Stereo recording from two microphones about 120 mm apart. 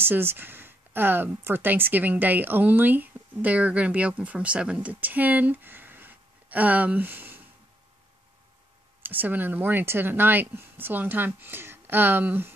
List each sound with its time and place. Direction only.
0.0 s speech: 20° right (ahead or behind)
9.0 s speech: 15° right (ahead or behind)